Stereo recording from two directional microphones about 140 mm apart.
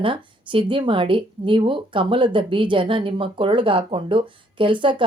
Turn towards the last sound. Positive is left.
turn(degrees=-35)  # may be behind; listen again after turning